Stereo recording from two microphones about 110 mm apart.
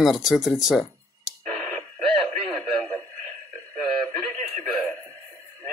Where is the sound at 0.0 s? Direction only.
Centre (ahead or behind).